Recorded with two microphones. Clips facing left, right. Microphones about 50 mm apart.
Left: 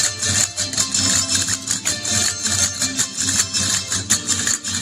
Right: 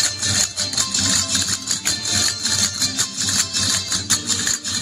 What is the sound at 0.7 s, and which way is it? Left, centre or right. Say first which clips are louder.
Music: even; left.